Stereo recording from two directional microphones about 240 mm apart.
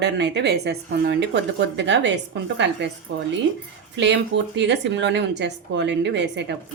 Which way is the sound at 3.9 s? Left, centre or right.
Right.